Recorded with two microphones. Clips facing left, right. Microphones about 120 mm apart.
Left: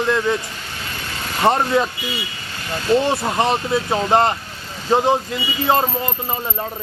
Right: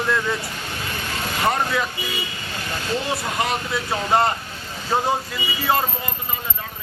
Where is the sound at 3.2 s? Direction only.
30° left (ahead or behind).